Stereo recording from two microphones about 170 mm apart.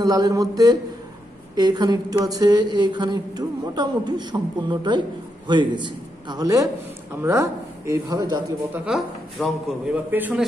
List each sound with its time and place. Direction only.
0.0 s a man's voice: 20° right (ahead or behind)
8.7 s speech: 5° right (ahead or behind)